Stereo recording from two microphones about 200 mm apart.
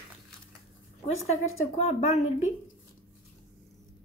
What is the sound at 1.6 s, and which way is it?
Speech, 30° left (ahead or behind).